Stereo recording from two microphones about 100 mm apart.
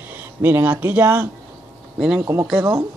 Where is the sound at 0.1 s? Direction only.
20° right (ahead or behind).